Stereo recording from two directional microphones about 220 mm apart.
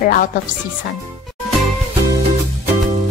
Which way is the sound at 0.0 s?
40° left (ahead or behind).